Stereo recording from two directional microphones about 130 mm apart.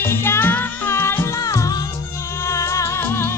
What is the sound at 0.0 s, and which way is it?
Music, 15° left (ahead or behind).